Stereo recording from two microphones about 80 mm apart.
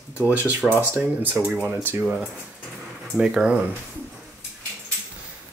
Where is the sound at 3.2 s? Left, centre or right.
Centre.